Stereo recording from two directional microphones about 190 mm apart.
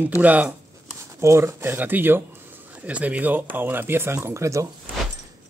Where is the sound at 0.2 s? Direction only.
10° right (ahead or behind).